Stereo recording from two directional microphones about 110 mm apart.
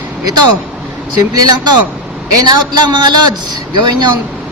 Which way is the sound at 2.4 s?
40° right (ahead or behind).